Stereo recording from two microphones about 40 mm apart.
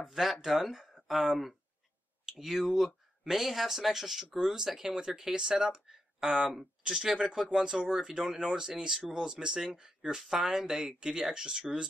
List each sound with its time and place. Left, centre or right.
0.0 s speech: centre